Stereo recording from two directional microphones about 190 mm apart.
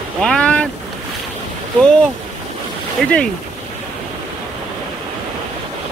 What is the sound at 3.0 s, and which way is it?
Speech, 5° left (ahead or behind).